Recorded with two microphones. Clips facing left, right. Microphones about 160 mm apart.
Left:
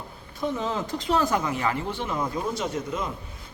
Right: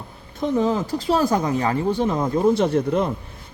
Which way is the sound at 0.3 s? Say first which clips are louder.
Right 7 dB; 40° right (ahead or behind).